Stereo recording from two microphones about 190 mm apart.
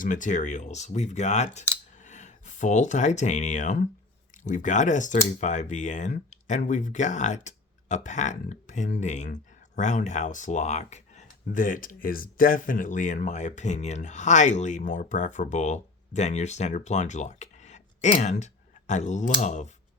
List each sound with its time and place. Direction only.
0.0 s speech: 40° left (ahead or behind)